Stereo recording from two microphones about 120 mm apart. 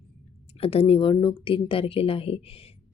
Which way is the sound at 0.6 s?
55° left (ahead or behind).